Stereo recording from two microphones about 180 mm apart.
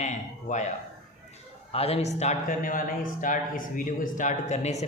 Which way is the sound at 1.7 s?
35° left (ahead or behind).